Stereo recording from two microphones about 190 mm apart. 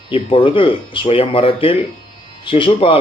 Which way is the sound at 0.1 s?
30° left (ahead or behind).